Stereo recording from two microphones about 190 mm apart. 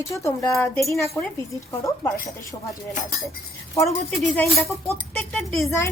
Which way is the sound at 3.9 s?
Centre (ahead or behind).